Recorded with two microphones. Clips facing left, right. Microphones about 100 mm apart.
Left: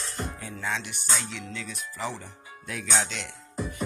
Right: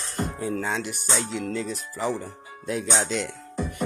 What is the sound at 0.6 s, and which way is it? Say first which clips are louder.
Music: right 4 dB; 45° right (ahead or behind).